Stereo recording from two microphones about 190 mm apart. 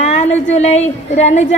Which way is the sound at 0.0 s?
35° left (ahead or behind).